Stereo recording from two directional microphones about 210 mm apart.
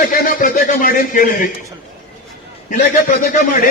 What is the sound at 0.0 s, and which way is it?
Speech, 40° left (ahead or behind).